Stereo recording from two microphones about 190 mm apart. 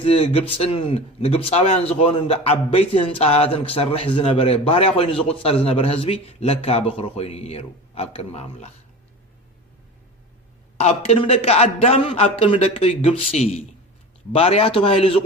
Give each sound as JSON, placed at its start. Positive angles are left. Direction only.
{"t": 0.0, "sound": "a man's voice", "side_deg": 30}
{"t": 10.8, "sound": "a man's voice", "side_deg": 35}